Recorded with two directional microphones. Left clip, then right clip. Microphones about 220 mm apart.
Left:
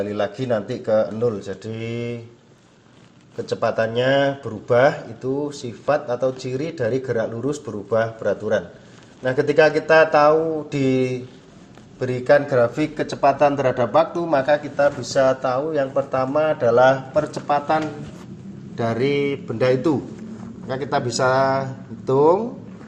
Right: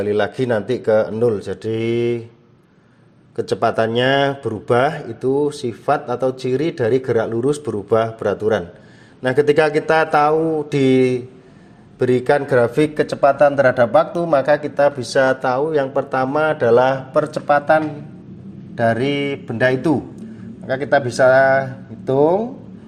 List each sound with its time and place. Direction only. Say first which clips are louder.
0.0 s a man's voice: right 5 dB; 45° right (ahead or behind)
3.3 s a man's voice: right 4 dB; 45° right (ahead or behind)
18.8 s speech: right 3 dB; 40° right (ahead or behind)